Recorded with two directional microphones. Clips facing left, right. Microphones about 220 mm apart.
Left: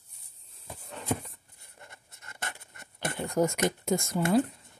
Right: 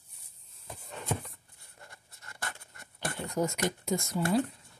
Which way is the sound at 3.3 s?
50° left (ahead or behind).